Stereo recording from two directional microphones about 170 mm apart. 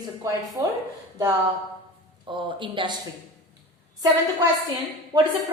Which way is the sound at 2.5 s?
30° right (ahead or behind).